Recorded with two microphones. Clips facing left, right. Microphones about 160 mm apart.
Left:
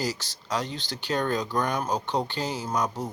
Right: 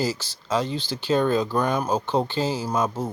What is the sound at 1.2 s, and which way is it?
Speech, 10° right (ahead or behind).